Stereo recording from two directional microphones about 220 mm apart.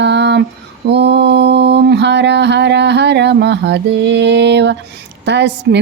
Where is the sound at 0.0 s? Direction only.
50° right (ahead or behind).